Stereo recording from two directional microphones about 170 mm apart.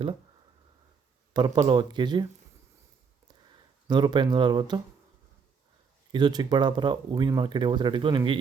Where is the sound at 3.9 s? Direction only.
25° right (ahead or behind).